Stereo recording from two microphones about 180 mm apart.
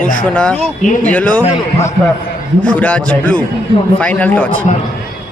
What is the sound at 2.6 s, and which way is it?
A man's voice, 5° left (ahead or behind).